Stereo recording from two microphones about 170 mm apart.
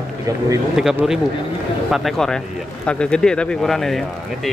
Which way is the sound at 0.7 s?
5° right (ahead or behind).